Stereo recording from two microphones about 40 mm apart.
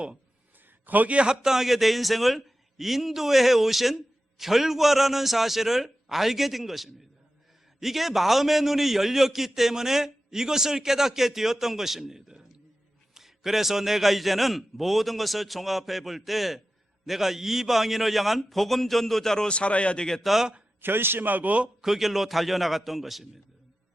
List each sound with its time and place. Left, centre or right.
0.9 s a man's voice: right
1.1 s a man's voice: right; by 19.5 s centre
19.5 s speech: left
20.2 s a man's voice: centre
20.8 s a man's voice: right
21.8 s a man's voice: centre